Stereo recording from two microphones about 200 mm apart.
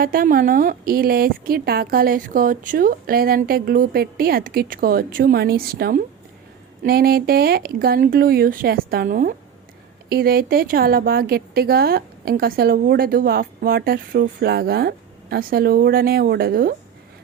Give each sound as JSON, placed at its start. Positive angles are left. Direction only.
{"t": 0.0, "sound": "a woman's voice", "side_deg": -45}